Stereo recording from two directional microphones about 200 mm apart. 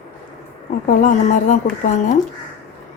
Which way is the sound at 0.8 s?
40° left (ahead or behind).